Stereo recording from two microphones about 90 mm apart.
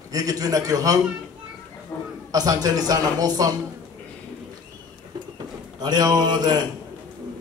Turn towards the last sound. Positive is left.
turn(degrees=-45)  # may be behind; listen again after turning